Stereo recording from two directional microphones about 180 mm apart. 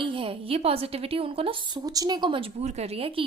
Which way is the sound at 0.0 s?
30° right (ahead or behind).